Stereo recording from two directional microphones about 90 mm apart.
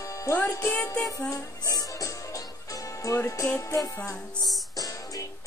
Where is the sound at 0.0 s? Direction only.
35° left (ahead or behind).